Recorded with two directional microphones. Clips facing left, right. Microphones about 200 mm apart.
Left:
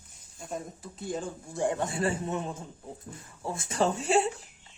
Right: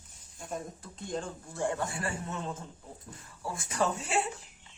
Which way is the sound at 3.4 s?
25° left (ahead or behind).